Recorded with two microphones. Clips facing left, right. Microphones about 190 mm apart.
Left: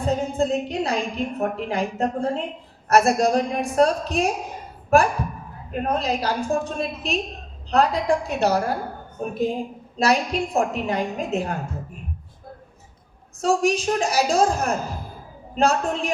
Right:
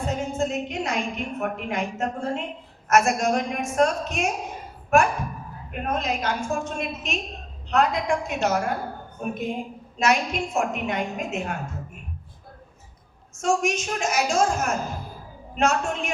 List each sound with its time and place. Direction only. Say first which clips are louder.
0.0 s a woman's voice: left 4 dB; 35° left (ahead or behind)
13.4 s a woman's voice: left 3 dB; 35° left (ahead or behind)